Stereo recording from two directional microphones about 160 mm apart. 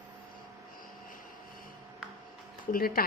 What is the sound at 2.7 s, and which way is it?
Speech, 65° left (ahead or behind).